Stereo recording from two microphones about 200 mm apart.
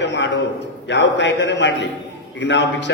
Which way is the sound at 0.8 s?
60° left (ahead or behind).